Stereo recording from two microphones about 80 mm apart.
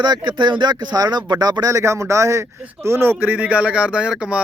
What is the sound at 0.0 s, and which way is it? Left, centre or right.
Speech, right.